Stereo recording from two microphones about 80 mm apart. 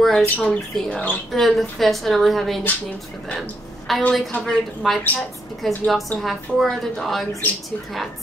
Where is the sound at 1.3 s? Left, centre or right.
Centre.